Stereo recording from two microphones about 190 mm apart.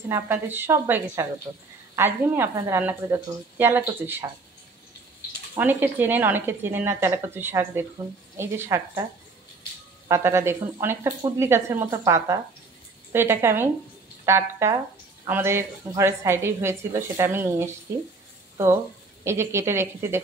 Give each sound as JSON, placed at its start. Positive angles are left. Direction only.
{"t": 0.1, "sound": "a woman's voice", "side_deg": -10}
{"t": 5.6, "sound": "a woman's voice", "side_deg": -10}
{"t": 10.0, "sound": "a woman's voice", "side_deg": -15}
{"t": 19.2, "sound": "a woman's voice", "side_deg": -15}